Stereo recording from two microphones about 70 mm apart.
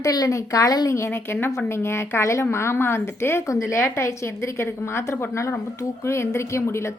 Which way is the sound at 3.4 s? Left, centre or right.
Left.